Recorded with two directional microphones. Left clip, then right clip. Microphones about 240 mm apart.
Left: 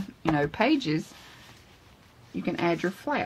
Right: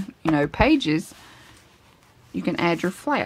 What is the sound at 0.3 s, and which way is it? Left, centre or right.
Speech, right.